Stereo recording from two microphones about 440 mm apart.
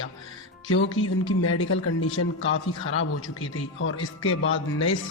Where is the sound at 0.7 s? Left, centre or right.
Left.